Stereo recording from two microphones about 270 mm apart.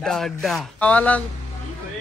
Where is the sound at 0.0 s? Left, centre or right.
Centre.